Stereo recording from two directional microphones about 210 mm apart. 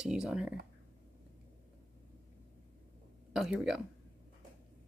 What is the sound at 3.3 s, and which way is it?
Speech, centre (ahead or behind).